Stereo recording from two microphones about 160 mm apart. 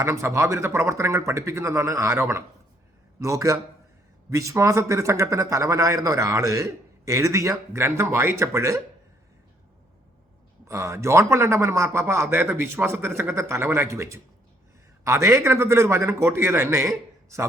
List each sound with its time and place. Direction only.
0.0 s a man's voice: 15° right (ahead or behind)
10.7 s a man's voice: 20° right (ahead or behind)